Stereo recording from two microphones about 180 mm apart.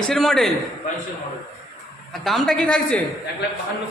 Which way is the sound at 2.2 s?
Centre (ahead or behind).